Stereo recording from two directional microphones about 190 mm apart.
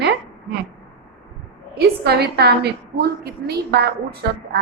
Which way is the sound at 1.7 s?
60° right (ahead or behind).